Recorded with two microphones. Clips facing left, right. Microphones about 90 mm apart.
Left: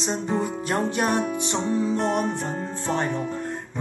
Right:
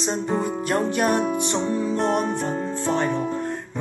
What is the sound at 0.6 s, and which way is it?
Music, 20° left (ahead or behind).